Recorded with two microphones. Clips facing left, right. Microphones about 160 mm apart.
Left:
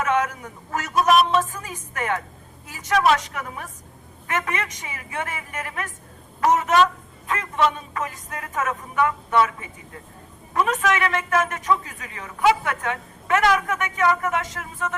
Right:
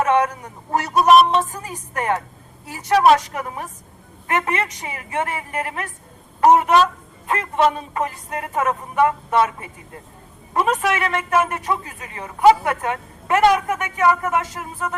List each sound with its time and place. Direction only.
0.0 s a man's voice: 35° right (ahead or behind)
10.5 s a man's voice: 30° right (ahead or behind)